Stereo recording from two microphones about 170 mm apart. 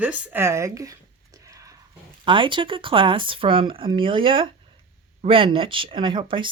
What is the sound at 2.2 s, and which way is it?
Speech, 30° right (ahead or behind).